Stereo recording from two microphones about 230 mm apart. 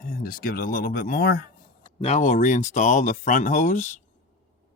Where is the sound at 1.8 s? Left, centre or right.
Left.